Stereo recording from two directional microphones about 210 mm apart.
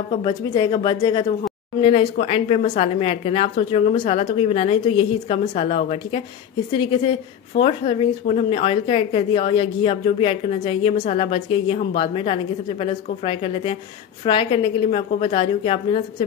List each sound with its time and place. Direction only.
0.1 s a woman's voice: 25° left (ahead or behind)